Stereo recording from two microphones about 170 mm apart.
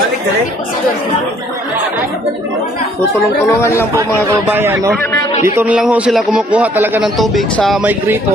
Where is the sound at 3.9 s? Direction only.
20° right (ahead or behind).